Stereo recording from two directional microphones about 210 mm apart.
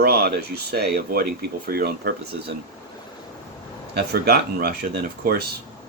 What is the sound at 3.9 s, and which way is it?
Speech, 50° right (ahead or behind).